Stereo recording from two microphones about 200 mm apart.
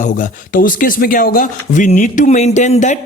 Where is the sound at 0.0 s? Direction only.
40° left (ahead or behind).